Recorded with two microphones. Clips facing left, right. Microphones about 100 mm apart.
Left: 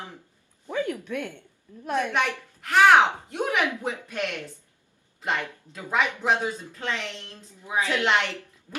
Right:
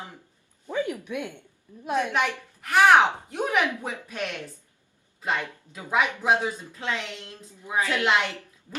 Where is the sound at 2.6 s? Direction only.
5° right (ahead or behind).